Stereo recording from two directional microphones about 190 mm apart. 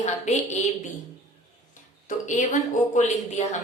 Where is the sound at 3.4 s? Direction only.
35° left (ahead or behind).